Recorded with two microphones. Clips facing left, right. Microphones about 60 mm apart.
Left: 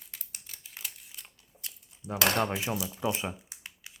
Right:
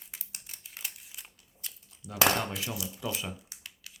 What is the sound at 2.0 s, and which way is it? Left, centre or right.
Speech, left.